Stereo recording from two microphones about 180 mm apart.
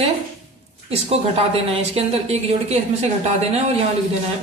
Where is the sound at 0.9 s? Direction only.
35° right (ahead or behind).